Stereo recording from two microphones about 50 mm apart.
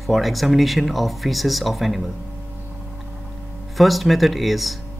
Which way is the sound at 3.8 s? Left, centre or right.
Centre.